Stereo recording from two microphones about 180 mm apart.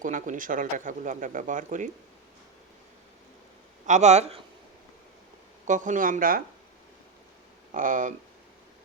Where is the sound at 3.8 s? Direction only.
40° right (ahead or behind).